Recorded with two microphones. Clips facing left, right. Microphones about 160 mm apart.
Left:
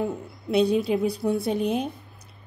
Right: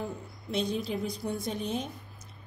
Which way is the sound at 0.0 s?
65° left (ahead or behind).